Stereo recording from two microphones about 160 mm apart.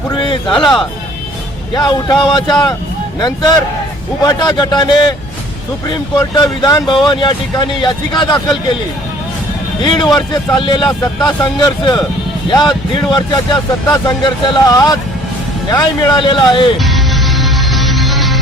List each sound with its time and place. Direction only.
0.2 s a sound: 30° left (ahead or behind)
0.6 s speech: 5° left (ahead or behind)
1.7 s speech: 25° left (ahead or behind)
9.8 s speech: 30° left (ahead or behind)
16.7 s music: centre (ahead or behind)